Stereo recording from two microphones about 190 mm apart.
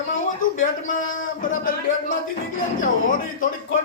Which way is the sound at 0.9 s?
45° left (ahead or behind).